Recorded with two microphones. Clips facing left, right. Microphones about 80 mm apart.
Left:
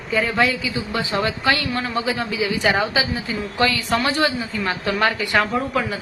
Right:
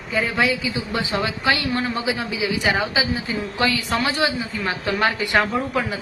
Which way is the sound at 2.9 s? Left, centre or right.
Right.